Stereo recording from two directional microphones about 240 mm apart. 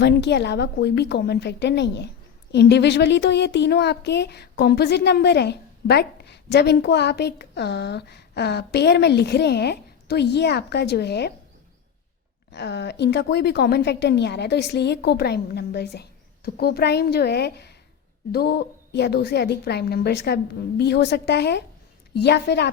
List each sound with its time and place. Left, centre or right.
0.0 s a woman's voice: left
12.5 s a woman's voice: left